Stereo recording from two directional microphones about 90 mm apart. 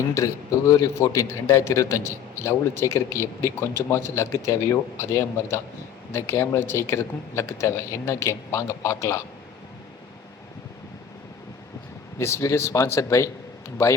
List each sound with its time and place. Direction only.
0.1 s a man's voice: 35° left (ahead or behind)
12.2 s a man's voice: 35° left (ahead or behind)